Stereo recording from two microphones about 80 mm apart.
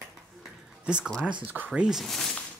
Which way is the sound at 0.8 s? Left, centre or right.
Centre.